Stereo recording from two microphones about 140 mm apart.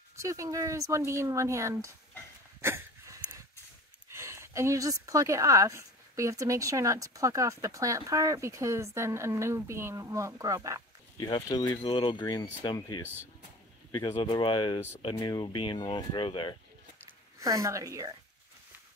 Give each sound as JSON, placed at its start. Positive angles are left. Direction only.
{"t": 0.1, "sound": "a woman's voice", "side_deg": -20}
{"t": 2.6, "sound": "a sound", "side_deg": -20}
{"t": 4.1, "sound": "a woman's voice", "side_deg": -20}
{"t": 11.1, "sound": "speech", "side_deg": 30}
{"t": 13.0, "sound": "speech", "side_deg": -15}
{"t": 14.1, "sound": "speech", "side_deg": 35}
{"t": 17.4, "sound": "a woman's voice", "side_deg": -25}